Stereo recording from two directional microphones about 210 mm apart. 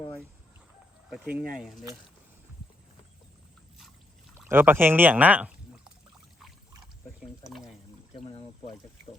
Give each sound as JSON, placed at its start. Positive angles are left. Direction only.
{"t": 1.5, "sound": "speech", "side_deg": 0}
{"t": 4.4, "sound": "speech", "side_deg": -10}
{"t": 7.5, "sound": "pour", "side_deg": 0}
{"t": 8.1, "sound": "pour", "side_deg": 25}